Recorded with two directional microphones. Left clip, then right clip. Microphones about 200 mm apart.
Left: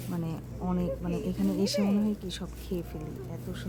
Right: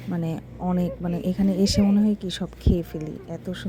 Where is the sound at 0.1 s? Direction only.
30° right (ahead or behind).